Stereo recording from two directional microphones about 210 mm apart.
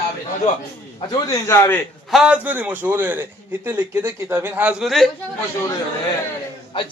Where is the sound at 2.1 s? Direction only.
5° right (ahead or behind).